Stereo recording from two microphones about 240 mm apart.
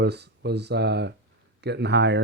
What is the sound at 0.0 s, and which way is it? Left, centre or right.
Speech, right.